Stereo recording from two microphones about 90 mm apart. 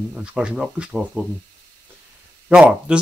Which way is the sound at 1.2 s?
25° right (ahead or behind).